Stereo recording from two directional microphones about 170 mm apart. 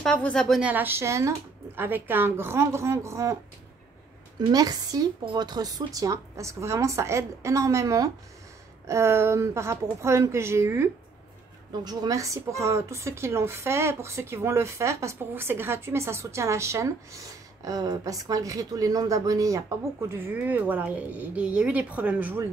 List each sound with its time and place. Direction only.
0.0 s speech: 5° left (ahead or behind); by 3.3 s 15° right (ahead or behind)
4.5 s speech: 20° right (ahead or behind)